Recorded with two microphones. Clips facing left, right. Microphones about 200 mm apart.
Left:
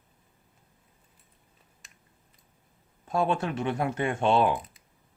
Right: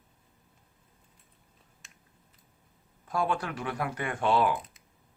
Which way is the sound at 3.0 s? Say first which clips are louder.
Left 3 dB; 25° left (ahead or behind).